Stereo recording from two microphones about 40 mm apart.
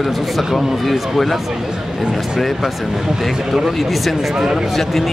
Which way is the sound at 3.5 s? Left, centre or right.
Centre.